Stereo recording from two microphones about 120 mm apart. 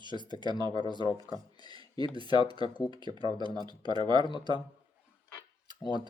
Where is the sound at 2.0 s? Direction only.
40° left (ahead or behind).